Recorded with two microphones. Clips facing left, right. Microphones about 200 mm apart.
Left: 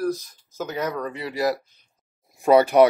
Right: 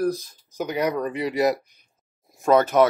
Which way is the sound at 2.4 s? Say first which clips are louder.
Left 2 dB; 10° left (ahead or behind).